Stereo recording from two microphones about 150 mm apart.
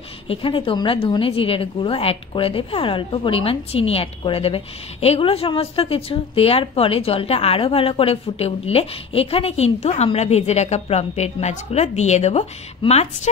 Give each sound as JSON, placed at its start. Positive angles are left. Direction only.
{"t": 0.3, "sound": "a woman's voice", "side_deg": 35}